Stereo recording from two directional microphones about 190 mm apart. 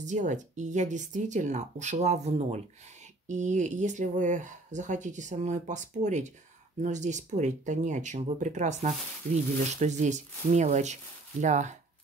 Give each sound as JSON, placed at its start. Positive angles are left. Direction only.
{"t": 0.0, "sound": "speech", "side_deg": -40}